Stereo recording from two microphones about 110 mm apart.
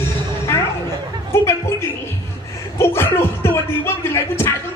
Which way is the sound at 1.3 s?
25° left (ahead or behind).